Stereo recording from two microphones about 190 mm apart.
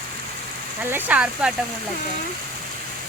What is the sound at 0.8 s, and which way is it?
Speech, 10° right (ahead or behind).